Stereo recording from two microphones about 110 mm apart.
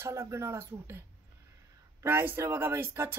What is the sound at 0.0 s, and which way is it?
Speech, 25° right (ahead or behind).